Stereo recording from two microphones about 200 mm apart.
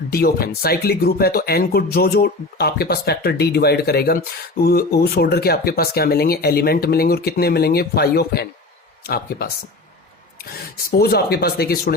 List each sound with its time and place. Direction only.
0.1 s speech: 50° left (ahead or behind)
10.5 s speech: 50° left (ahead or behind)